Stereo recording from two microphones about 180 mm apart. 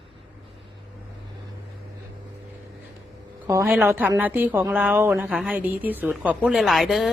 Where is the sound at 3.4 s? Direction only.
15° right (ahead or behind).